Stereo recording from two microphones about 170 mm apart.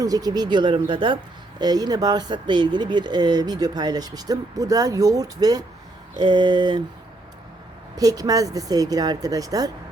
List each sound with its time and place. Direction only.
0.0 s speech: 20° right (ahead or behind)
7.9 s speech: 20° right (ahead or behind)